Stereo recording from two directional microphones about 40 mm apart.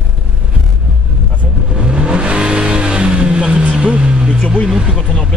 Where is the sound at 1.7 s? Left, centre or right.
Right.